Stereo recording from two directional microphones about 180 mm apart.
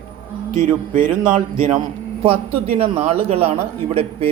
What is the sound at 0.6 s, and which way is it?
Speech, 45° right (ahead or behind).